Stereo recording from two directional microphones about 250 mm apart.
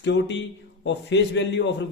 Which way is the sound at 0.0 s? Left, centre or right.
Left.